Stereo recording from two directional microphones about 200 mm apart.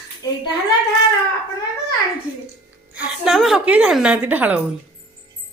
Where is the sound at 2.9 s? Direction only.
5° right (ahead or behind).